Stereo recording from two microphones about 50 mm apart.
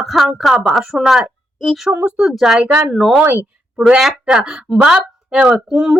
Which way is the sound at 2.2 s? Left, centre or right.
Centre.